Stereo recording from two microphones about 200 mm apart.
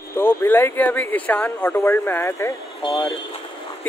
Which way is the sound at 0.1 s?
10° left (ahead or behind).